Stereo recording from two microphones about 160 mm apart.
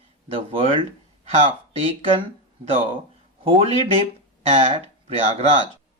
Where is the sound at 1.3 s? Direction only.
40° right (ahead or behind).